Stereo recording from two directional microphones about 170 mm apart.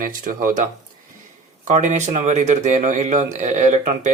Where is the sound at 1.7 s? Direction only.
45° right (ahead or behind).